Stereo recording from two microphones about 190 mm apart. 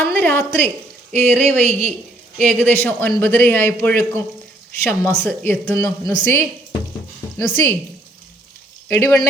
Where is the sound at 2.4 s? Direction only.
10° left (ahead or behind).